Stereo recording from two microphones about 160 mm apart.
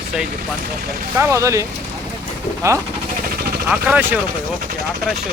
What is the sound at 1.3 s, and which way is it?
Speech, 20° right (ahead or behind).